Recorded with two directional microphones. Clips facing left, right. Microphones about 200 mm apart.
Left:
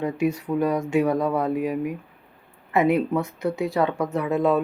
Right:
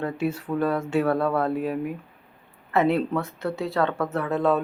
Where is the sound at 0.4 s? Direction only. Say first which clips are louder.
Left 2 dB; 15° left (ahead or behind).